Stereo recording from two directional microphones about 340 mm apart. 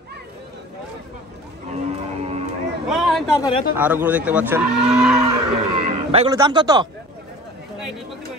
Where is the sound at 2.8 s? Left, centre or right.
Centre.